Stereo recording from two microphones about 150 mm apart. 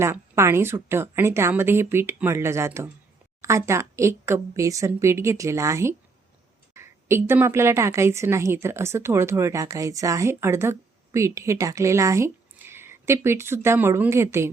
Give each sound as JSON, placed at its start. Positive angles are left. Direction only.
{"t": 0.0, "sound": "a woman's voice", "side_deg": -15}